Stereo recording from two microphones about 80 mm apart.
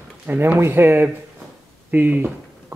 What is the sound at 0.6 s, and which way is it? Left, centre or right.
Speech, right.